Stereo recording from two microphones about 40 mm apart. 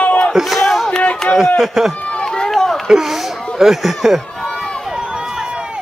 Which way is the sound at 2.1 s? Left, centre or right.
Centre.